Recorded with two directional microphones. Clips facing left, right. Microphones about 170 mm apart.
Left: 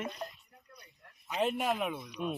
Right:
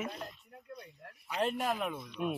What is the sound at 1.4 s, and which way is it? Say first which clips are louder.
Speech: left 2 dB; 5° left (ahead or behind).